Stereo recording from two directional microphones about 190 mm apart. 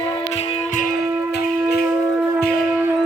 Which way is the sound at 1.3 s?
55° left (ahead or behind).